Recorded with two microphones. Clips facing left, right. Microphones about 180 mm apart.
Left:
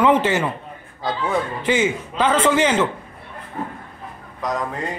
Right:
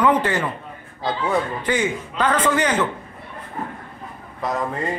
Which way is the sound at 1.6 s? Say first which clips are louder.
Left 2 dB; 25° left (ahead or behind).